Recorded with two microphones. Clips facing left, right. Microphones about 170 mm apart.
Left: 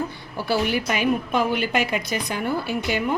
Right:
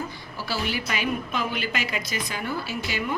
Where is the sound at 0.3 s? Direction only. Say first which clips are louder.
Left 7 dB; 55° left (ahead or behind).